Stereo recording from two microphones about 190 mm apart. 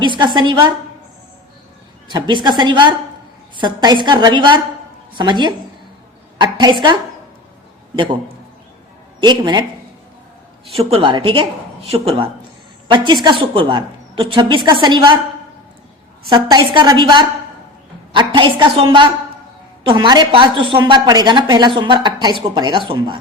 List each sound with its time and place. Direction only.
0.0 s a woman's voice: 25° right (ahead or behind)
2.0 s a woman's voice: 25° right (ahead or behind)
7.9 s a woman's voice: 25° right (ahead or behind)
9.2 s a woman's voice: 25° right (ahead or behind)
10.8 s a woman's voice: 30° right (ahead or behind)
16.3 s a woman's voice: 25° right (ahead or behind)